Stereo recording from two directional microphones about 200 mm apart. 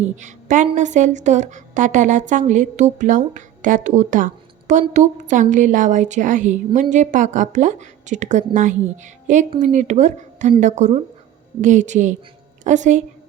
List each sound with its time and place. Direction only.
0.0 s a woman's voice: 35° right (ahead or behind)